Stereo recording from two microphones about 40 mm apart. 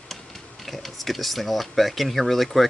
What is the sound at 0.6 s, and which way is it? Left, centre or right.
Speech, centre.